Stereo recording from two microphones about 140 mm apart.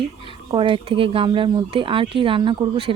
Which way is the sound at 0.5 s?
40° right (ahead or behind).